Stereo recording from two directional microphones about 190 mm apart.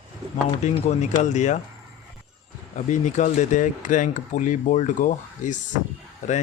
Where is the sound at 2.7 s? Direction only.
40° left (ahead or behind).